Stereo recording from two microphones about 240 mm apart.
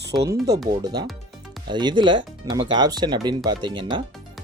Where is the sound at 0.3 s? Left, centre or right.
Centre.